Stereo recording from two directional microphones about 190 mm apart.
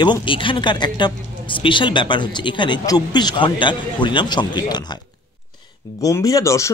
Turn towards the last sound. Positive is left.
turn(degrees=15)  # may be behind; listen again after turning